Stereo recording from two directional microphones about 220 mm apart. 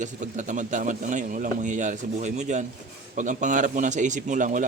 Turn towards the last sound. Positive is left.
turn(degrees=-35)  # may be behind; listen again after turning